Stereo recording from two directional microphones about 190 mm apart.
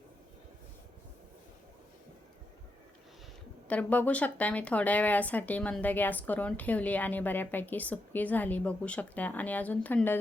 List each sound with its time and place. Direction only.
3.7 s speech: 10° left (ahead or behind)